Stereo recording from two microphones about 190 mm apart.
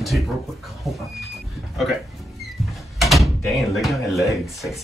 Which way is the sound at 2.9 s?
Centre (ahead or behind).